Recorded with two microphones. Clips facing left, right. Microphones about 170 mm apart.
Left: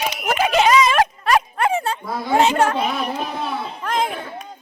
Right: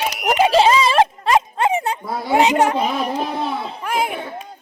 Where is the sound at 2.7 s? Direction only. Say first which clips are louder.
Right 2 dB; 35° right (ahead or behind).